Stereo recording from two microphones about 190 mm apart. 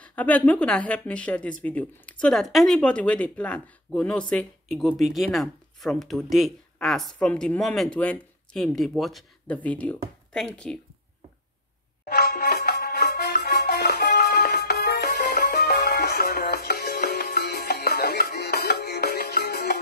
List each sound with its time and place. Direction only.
0.0 s speech: 10° left (ahead or behind)
12.1 s music: 55° left (ahead or behind)